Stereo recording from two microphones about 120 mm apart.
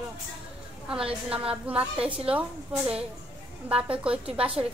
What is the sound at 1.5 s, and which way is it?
Speech, 10° right (ahead or behind).